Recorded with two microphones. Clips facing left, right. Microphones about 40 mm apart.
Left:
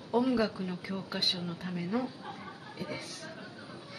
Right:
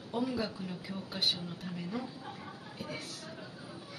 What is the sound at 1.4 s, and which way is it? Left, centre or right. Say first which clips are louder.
Speech: left 4 dB; left.